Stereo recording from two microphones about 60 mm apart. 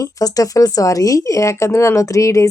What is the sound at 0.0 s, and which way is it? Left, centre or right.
Speech, left.